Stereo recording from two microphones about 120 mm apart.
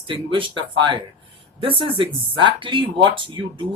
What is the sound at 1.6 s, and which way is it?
Speech, 45° right (ahead or behind).